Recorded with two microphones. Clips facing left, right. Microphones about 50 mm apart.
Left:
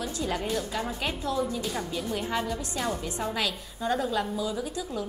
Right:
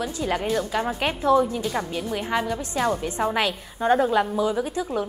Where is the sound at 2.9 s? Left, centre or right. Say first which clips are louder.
Right 7 dB; right.